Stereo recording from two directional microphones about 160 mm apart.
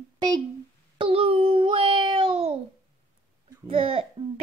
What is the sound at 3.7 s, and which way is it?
Speech, 35° right (ahead or behind).